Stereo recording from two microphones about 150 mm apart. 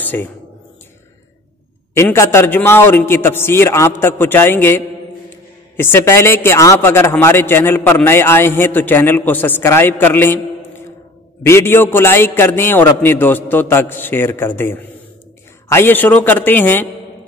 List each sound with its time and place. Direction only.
0.0 s speech: 15° left (ahead or behind)
2.0 s a man's voice: 15° left (ahead or behind)
11.4 s a man's voice: 15° left (ahead or behind)